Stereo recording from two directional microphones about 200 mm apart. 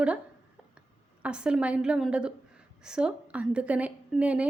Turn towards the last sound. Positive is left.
turn(degrees=-5)  # may be behind; listen again after turning